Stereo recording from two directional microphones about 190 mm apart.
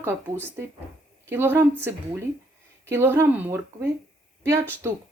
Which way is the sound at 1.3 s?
10° right (ahead or behind).